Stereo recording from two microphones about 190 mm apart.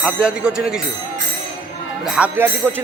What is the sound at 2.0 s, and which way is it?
Speech, 5° right (ahead or behind).